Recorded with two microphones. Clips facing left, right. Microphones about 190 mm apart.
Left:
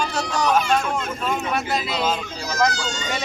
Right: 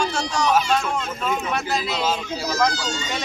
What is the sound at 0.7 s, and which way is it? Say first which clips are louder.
Speech: left 1 dB; 10° left (ahead or behind).